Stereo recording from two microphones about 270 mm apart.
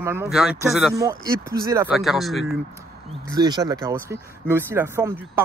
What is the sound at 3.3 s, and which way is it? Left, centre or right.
Speech, centre.